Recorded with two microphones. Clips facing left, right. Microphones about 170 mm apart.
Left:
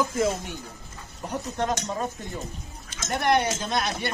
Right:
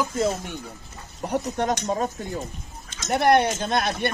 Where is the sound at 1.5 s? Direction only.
35° right (ahead or behind).